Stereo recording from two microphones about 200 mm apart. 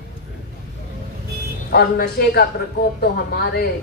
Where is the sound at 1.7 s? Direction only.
55° left (ahead or behind).